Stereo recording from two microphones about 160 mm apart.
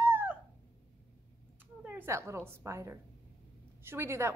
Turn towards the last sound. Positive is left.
turn(degrees=-15)  # may be behind; listen again after turning